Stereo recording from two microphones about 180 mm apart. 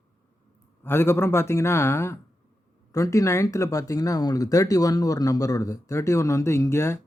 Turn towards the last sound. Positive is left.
turn(degrees=15)  # may be behind; listen again after turning